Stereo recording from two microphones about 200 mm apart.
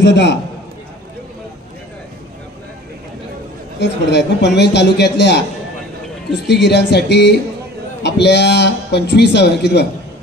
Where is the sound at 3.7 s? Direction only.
60° left (ahead or behind).